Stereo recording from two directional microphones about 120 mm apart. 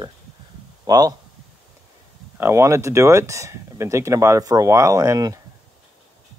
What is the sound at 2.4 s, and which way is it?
Speech, 25° right (ahead or behind).